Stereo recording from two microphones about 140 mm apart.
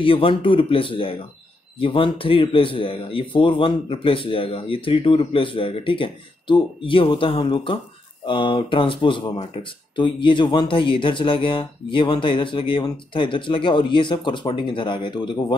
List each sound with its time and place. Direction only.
0.0 s speech: 40° left (ahead or behind)